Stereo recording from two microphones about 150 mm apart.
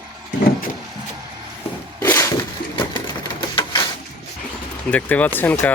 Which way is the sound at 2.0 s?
15° left (ahead or behind).